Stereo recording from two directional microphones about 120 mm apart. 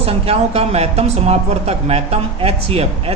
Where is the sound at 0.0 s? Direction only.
55° right (ahead or behind).